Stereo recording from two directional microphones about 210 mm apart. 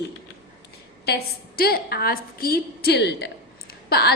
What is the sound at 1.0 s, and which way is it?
A woman's voice, 50° left (ahead or behind).